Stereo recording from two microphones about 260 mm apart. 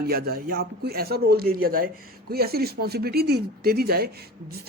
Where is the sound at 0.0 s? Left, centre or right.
Right.